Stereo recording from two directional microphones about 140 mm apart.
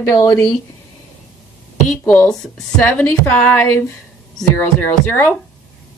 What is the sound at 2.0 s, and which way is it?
Speech, 10° left (ahead or behind).